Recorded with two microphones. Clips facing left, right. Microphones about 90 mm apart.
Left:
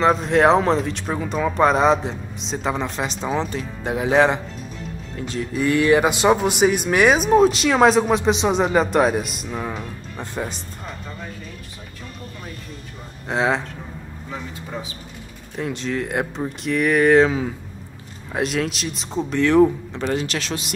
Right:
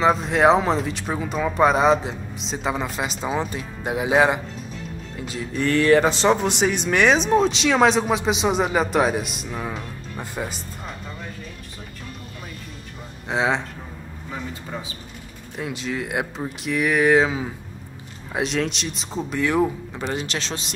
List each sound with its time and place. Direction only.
0.0 s speech: centre (ahead or behind)
5.6 s speech: 15° left (ahead or behind); by 11.0 s 5° right (ahead or behind)
13.3 s speech: centre (ahead or behind)
15.5 s speech: 5° right (ahead or behind)
20.2 s speech: 25° right (ahead or behind)